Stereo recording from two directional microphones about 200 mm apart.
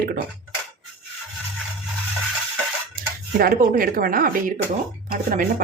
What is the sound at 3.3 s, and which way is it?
A woman's voice, 45° right (ahead or behind).